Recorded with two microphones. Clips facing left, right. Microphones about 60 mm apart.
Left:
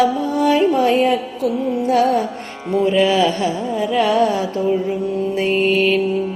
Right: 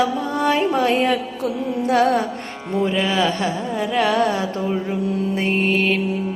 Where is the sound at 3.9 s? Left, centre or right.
Right.